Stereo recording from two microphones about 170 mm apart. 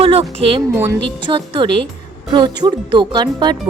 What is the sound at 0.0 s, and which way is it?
Speech, 35° right (ahead or behind).